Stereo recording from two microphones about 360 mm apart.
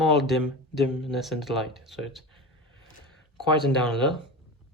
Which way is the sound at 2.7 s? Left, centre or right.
Centre.